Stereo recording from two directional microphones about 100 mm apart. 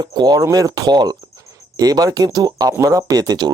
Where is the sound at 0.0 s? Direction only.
45° right (ahead or behind).